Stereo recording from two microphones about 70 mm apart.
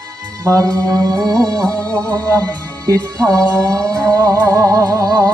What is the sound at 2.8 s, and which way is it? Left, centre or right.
Music, right.